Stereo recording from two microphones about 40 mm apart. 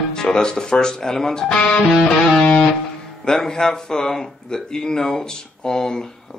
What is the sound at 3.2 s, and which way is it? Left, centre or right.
Speech, centre.